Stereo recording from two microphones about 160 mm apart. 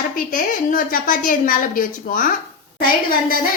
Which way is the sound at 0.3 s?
60° left (ahead or behind).